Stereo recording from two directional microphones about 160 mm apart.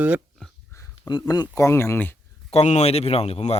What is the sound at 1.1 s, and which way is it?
Speech, 30° left (ahead or behind).